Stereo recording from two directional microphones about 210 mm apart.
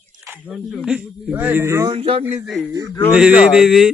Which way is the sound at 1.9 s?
30° right (ahead or behind).